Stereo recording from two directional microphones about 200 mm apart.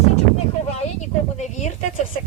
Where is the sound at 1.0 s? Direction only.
35° left (ahead or behind).